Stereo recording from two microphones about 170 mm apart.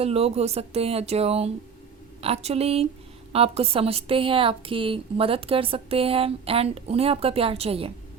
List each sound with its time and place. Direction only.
0.0 s a woman's voice: 35° right (ahead or behind)